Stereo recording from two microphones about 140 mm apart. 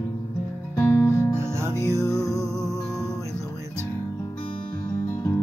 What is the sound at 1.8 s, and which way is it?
Music, 25° left (ahead or behind).